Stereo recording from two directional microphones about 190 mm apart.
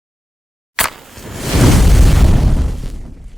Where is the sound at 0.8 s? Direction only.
Centre (ahead or behind).